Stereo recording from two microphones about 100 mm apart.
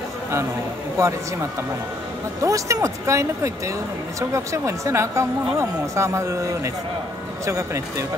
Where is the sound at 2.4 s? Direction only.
35° right (ahead or behind).